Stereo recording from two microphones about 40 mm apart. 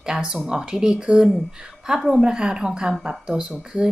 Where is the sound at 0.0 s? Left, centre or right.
Centre.